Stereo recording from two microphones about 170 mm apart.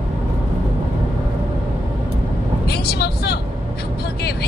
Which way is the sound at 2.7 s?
70° left (ahead or behind).